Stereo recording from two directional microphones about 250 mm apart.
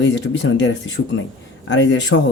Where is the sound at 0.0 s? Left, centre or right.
Left.